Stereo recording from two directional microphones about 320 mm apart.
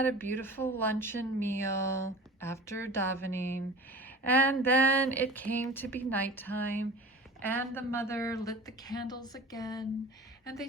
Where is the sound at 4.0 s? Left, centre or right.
Centre.